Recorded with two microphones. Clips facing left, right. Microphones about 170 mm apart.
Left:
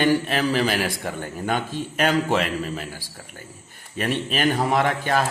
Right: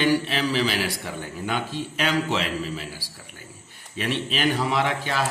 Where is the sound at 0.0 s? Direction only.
50° left (ahead or behind).